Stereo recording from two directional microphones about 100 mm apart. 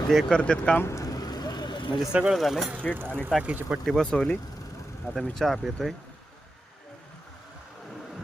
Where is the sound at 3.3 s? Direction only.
15° right (ahead or behind).